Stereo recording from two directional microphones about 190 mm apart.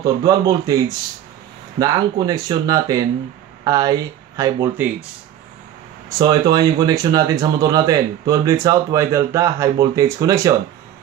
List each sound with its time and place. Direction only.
0.0 s speech: 20° right (ahead or behind)
6.0 s speech: 20° right (ahead or behind)